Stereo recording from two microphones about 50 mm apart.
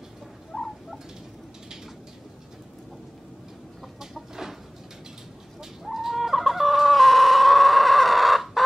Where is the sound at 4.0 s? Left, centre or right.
Centre.